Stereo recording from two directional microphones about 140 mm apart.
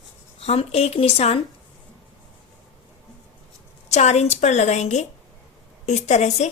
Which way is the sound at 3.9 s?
55° left (ahead or behind).